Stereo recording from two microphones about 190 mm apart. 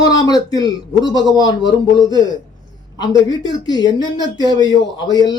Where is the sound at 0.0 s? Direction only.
20° left (ahead or behind).